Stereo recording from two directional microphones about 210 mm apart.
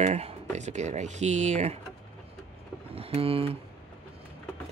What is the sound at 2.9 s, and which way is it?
Speech, 30° right (ahead or behind).